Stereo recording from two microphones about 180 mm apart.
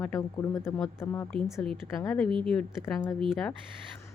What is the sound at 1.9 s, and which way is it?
A woman's voice, 15° left (ahead or behind).